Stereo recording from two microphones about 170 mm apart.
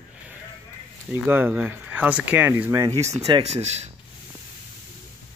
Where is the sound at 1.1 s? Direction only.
10° right (ahead or behind).